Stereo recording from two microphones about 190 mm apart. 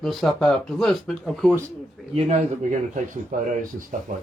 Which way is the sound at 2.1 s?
35° right (ahead or behind).